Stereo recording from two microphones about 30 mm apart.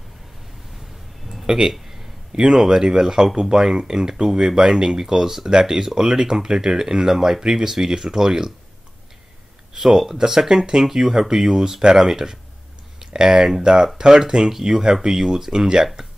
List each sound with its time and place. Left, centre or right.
1.4 s a sound: right
2.4 s speech: centre
9.8 s speech: centre